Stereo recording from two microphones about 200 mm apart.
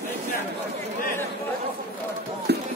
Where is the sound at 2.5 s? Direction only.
55° right (ahead or behind).